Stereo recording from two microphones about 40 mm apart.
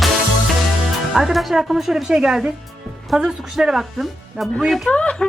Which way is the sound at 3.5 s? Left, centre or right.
Centre.